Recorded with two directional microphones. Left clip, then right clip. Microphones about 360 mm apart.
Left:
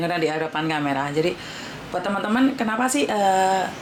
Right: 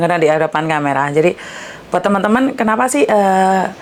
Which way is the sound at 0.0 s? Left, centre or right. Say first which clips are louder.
Right 10 dB; right.